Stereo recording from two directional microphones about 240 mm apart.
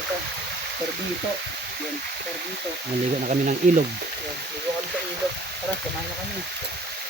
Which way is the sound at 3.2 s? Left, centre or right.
Right.